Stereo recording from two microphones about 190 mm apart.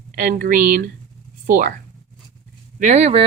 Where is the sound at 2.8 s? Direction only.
40° right (ahead or behind).